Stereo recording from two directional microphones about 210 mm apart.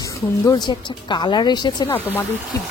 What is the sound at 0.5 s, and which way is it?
Speech, 20° left (ahead or behind).